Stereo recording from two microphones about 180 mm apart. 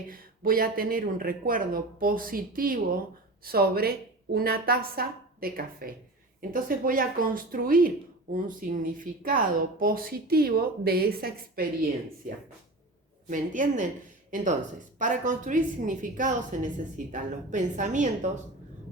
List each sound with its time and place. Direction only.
0.1 s a woman's voice: 55° right (ahead or behind)
13.2 s speech: 45° right (ahead or behind)
14.9 s speech: 45° right (ahead or behind)